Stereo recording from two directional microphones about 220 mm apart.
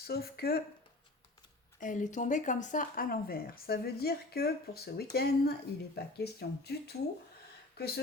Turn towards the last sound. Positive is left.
turn(degrees=45)  # may be behind; listen again after turning